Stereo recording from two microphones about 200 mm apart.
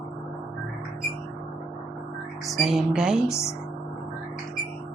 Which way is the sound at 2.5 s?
Centre (ahead or behind).